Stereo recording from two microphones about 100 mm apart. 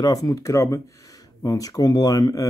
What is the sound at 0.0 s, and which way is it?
Speech, 40° left (ahead or behind).